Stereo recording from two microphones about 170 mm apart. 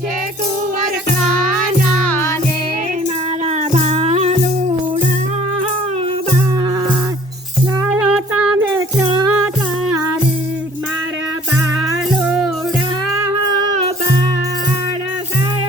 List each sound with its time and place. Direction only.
3.4 s music: 45° right (ahead or behind)
7.9 s music: 5° right (ahead or behind)
13.1 s music: 20° right (ahead or behind)